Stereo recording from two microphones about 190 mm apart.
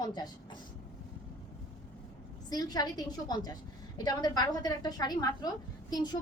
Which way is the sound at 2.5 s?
20° left (ahead or behind).